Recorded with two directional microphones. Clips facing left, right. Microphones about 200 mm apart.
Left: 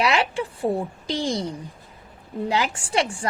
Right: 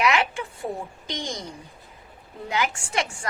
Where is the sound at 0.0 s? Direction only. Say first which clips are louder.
Left 1 dB; 35° left (ahead or behind).